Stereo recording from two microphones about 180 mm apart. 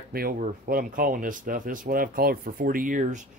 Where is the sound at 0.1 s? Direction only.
55° right (ahead or behind).